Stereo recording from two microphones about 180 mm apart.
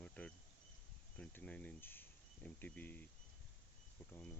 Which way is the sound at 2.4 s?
10° left (ahead or behind).